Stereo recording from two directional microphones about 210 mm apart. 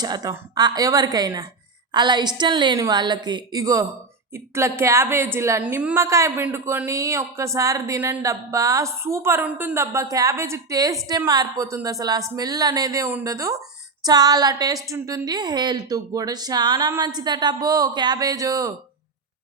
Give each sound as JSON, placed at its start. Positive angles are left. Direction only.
{"t": 0.0, "sound": "a woman's voice", "side_deg": -20}